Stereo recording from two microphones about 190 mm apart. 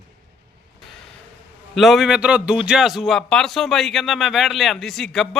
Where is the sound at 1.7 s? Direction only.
Centre (ahead or behind).